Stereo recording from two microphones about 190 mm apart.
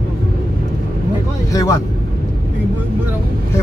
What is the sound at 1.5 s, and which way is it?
Speech, 15° left (ahead or behind).